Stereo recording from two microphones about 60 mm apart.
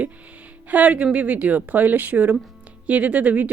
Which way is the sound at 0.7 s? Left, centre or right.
Right.